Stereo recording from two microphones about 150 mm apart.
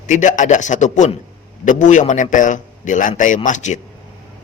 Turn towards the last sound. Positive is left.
turn(degrees=55)  # may be behind; listen again after turning